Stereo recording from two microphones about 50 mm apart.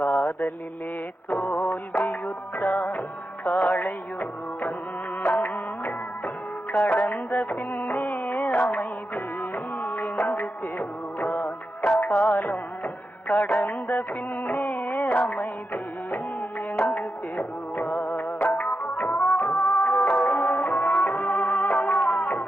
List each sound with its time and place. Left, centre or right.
0.0 s mantra: left
1.3 s music: left